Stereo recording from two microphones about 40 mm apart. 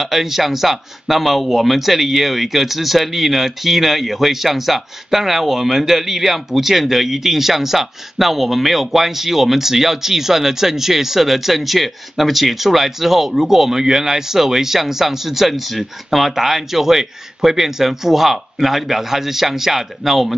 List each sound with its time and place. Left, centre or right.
0.0 s speech: centre